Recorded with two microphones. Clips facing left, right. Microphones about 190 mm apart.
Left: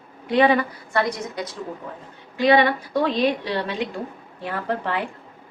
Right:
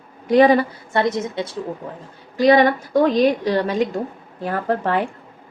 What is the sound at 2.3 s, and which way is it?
A woman's voice, 40° right (ahead or behind).